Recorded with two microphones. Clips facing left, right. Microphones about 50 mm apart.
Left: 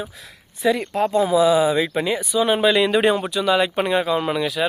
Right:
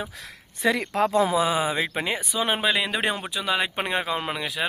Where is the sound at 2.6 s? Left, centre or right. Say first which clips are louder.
Left 7 dB; centre.